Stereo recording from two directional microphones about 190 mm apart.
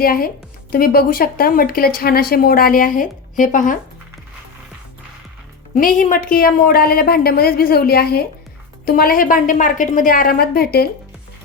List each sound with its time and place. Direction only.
0.0 s speech: 50° left (ahead or behind)
5.7 s speech: 45° left (ahead or behind)